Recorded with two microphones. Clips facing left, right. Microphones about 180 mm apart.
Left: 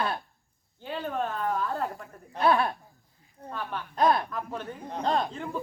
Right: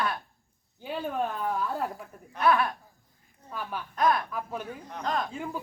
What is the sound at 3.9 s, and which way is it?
Speech, 30° left (ahead or behind).